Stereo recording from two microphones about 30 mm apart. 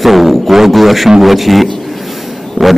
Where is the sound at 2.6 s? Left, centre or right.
Left.